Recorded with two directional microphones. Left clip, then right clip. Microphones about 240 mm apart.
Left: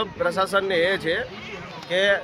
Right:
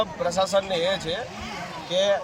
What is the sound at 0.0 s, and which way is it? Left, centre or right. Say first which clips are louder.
Speech: left 1 dB; centre.